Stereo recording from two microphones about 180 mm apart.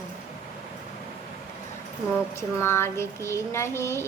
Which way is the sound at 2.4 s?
15° left (ahead or behind).